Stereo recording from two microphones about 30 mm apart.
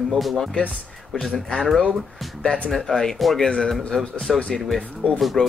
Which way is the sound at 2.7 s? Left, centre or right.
Centre.